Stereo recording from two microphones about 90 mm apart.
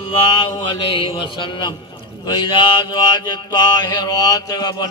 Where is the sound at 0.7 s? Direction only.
70° left (ahead or behind); by 4.8 s 45° left (ahead or behind).